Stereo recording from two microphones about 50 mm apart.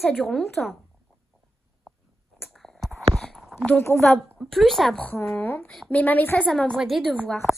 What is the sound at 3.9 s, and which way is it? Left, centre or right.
Speech, left.